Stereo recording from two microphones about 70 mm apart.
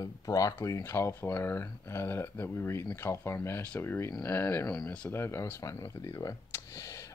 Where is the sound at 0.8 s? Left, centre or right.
Left.